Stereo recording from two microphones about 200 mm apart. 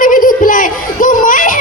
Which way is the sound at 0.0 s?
45° left (ahead or behind).